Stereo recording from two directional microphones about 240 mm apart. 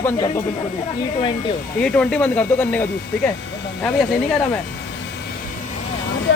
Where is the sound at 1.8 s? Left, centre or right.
Centre.